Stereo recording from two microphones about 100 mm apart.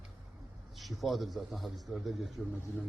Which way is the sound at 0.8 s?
Centre (ahead or behind).